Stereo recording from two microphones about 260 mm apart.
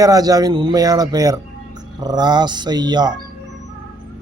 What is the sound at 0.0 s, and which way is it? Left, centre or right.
Speech, centre.